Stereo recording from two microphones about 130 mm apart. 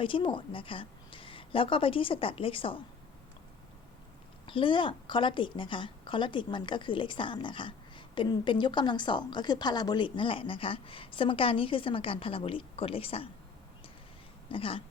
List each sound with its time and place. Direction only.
0.0 s a woman's voice: 40° left (ahead or behind)
4.4 s a woman's voice: 40° left (ahead or behind)
14.5 s a woman's voice: 45° left (ahead or behind)